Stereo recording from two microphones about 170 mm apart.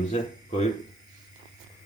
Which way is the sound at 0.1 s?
40° left (ahead or behind).